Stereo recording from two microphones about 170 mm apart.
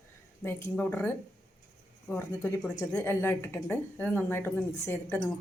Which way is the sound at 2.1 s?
10° left (ahead or behind).